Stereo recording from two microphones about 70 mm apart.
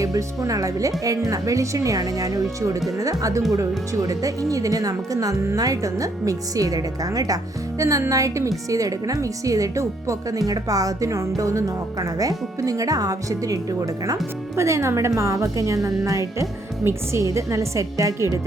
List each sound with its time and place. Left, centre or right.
0.0 s speech: right
14.5 s speech: right